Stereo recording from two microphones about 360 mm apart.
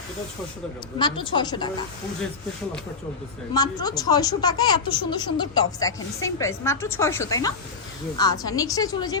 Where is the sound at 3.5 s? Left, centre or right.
Centre.